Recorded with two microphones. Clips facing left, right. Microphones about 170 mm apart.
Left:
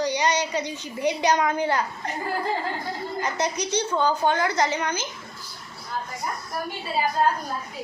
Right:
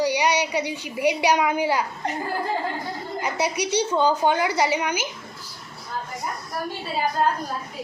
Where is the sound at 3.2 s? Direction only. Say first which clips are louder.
Right 2 dB; 10° right (ahead or behind).